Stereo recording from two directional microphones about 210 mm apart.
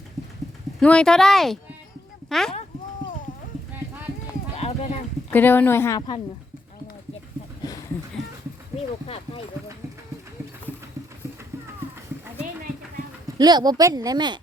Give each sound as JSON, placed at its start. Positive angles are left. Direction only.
{"t": 0.8, "sound": "speech", "side_deg": 5}
{"t": 4.5, "sound": "clip-clop", "side_deg": 30}
{"t": 5.3, "sound": "a woman's voice", "side_deg": 10}
{"t": 13.4, "sound": "speech", "side_deg": -20}